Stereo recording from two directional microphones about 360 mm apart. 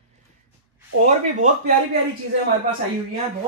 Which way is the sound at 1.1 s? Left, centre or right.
Centre.